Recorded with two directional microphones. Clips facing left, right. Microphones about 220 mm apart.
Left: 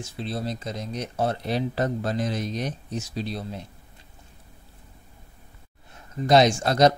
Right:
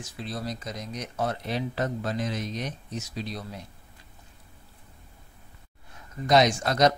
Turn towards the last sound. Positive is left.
turn(degrees=30)  # may be behind; listen again after turning